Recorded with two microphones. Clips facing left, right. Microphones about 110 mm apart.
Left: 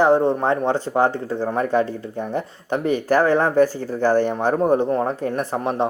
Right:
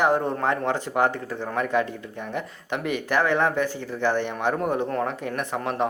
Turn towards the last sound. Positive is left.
turn(degrees=30)  # may be behind; listen again after turning